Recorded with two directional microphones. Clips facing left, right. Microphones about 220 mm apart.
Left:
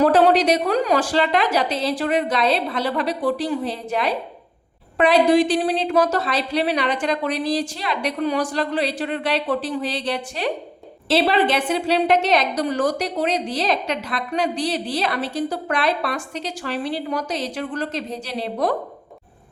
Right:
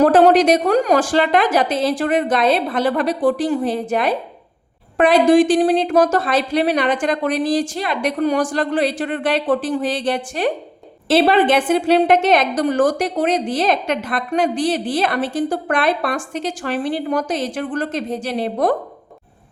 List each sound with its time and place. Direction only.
0.0 s a woman's voice: 45° right (ahead or behind)